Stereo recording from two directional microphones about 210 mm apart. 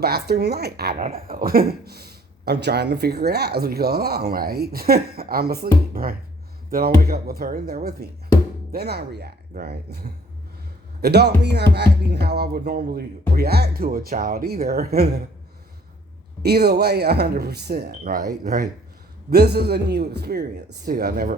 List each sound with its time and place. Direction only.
0.0 s a man's voice: 50° right (ahead or behind)
16.4 s a man's voice: 50° right (ahead or behind)
18.0 s speech: 35° right (ahead or behind)
19.3 s a man's voice: 50° right (ahead or behind)